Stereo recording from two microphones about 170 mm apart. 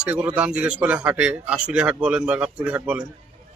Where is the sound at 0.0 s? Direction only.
10° right (ahead or behind).